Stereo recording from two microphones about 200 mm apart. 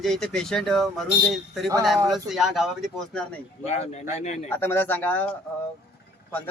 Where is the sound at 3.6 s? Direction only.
35° left (ahead or behind).